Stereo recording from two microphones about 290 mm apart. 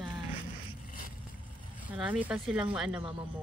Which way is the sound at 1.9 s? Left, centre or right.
Centre.